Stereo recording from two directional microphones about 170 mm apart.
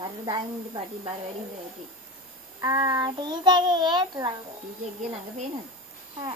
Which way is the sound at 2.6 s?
20° right (ahead or behind).